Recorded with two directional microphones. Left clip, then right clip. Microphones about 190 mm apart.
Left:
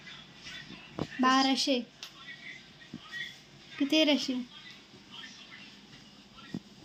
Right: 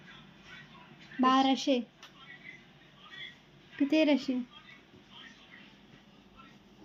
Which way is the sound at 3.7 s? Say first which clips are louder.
Left 1 dB; 10° right (ahead or behind).